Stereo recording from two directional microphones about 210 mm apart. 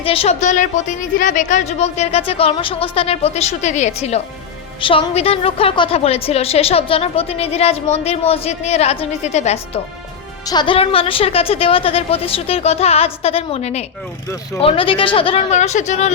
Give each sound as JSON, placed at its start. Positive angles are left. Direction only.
{"t": 0.0, "sound": "a woman's voice", "side_deg": 25}
{"t": 10.4, "sound": "a woman's voice", "side_deg": 20}